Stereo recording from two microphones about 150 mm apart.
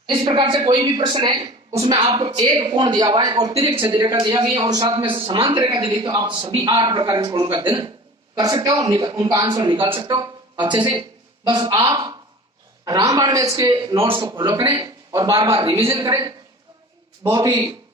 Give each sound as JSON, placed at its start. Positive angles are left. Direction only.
{"t": 0.2, "sound": "a woman's voice", "side_deg": -30}
{"t": 16.0, "sound": "a woman's voice", "side_deg": -30}